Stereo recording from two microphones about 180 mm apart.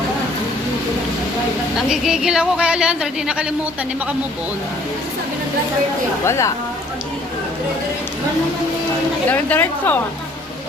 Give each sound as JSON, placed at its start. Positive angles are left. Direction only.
{"t": 1.9, "sound": "a woman's voice", "side_deg": -5}
{"t": 6.2, "sound": "a woman's voice", "side_deg": 15}
{"t": 9.3, "sound": "a woman's voice", "side_deg": 10}